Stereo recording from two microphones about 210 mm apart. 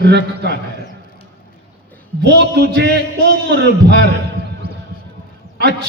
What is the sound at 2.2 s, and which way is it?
A man's voice, 50° right (ahead or behind).